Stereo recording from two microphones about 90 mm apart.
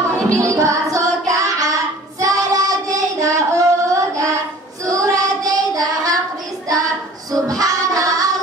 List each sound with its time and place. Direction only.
0.4 s music: 35° right (ahead or behind)
1.3 s child singing: 40° right (ahead or behind)
7.3 s child singing: 40° right (ahead or behind)